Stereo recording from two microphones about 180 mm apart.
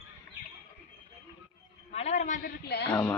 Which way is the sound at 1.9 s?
35° left (ahead or behind).